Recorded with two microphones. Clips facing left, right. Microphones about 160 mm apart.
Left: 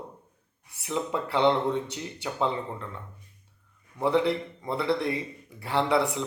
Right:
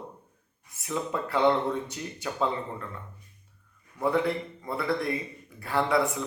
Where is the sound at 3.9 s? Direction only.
20° left (ahead or behind).